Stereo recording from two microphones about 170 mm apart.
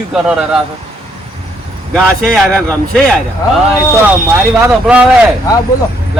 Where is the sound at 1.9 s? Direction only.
Centre (ahead or behind).